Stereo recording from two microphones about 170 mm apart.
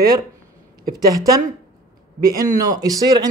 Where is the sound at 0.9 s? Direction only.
20° right (ahead or behind).